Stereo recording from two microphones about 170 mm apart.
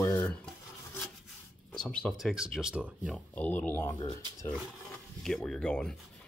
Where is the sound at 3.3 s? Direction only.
10° left (ahead or behind).